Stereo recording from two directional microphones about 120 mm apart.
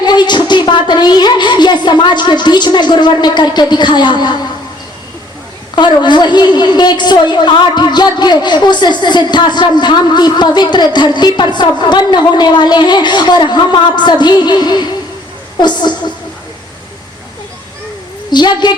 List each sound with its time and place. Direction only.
0.0 s a woman's voice: 35° left (ahead or behind)
5.7 s a woman's voice: 40° left (ahead or behind)
18.3 s a woman's voice: 40° left (ahead or behind)